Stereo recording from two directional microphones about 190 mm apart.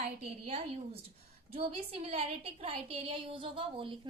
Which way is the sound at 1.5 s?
30° right (ahead or behind).